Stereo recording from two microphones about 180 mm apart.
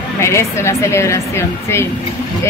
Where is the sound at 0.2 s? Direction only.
15° left (ahead or behind).